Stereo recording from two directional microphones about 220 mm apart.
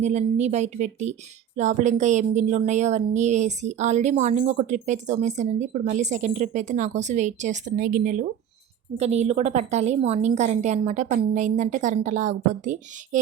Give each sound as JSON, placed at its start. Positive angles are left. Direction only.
{"t": 0.0, "sound": "a woman's voice", "side_deg": -30}